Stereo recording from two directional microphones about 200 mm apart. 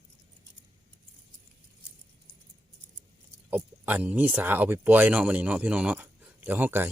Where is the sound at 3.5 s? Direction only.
10° right (ahead or behind).